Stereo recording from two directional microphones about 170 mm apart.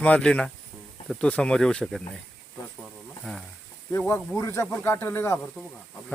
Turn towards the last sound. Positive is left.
turn(degrees=15)  # may be behind; listen again after turning